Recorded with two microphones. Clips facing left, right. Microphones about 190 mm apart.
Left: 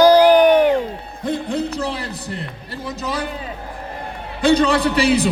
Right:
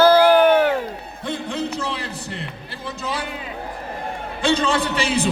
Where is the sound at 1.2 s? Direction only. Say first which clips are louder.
Left 4 dB; 35° left (ahead or behind).